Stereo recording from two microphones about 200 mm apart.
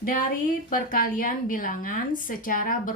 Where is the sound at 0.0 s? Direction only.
45° left (ahead or behind).